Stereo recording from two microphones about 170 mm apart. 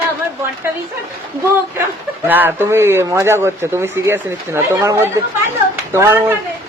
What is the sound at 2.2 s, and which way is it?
Speech, 10° right (ahead or behind).